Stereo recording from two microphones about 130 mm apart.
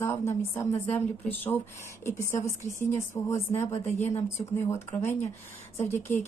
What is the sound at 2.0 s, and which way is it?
A woman's voice, 20° left (ahead or behind).